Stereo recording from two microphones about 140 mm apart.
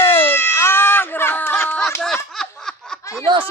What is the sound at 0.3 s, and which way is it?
Baby cry, 15° left (ahead or behind).